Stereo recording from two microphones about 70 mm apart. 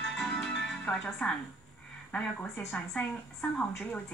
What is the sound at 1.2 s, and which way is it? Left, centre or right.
Speech, centre.